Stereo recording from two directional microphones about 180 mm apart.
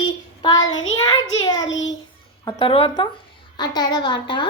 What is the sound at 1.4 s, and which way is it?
A child's voice, 20° left (ahead or behind).